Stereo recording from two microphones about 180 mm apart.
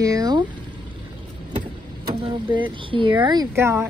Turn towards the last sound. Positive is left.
turn(degrees=-15)  # may be behind; listen again after turning